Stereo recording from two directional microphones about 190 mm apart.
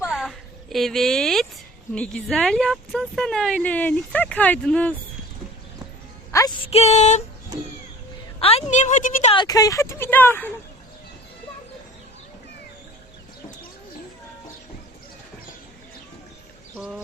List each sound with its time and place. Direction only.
0.1 s a sound: centre (ahead or behind)
1.9 s speech: 5° left (ahead or behind)
6.7 s a woman's voice: 35° left (ahead or behind)
8.4 s a woman's voice: 30° left (ahead or behind)
9.3 s speech: 20° left (ahead or behind)
16.7 s speech: centre (ahead or behind)